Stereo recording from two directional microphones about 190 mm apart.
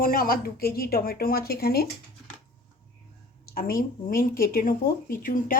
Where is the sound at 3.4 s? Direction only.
50° left (ahead or behind).